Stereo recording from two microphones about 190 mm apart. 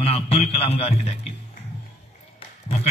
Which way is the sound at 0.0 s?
30° left (ahead or behind).